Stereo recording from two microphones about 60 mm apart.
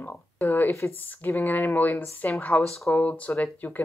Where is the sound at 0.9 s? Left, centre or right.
Left.